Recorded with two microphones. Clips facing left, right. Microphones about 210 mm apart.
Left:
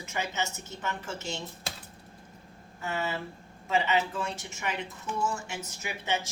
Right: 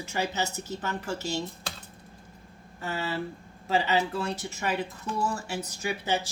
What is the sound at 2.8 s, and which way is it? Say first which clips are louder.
A woman's voice: right 1 dB; 35° right (ahead or behind).